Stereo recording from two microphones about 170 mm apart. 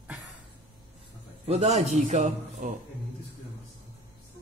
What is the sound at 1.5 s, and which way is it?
A man's voice, 40° right (ahead or behind).